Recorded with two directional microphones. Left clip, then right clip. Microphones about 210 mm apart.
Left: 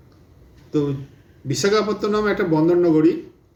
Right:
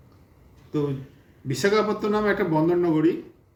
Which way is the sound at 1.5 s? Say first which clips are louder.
Left 3 dB; centre (ahead or behind).